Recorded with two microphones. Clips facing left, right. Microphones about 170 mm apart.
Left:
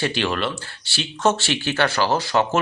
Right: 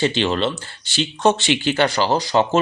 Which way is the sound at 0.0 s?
20° right (ahead or behind).